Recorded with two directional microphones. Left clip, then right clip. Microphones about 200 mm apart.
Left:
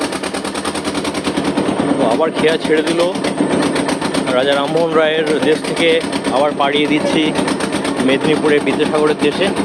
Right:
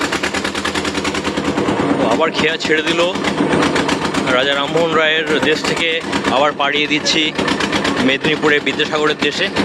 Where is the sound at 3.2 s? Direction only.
50° left (ahead or behind).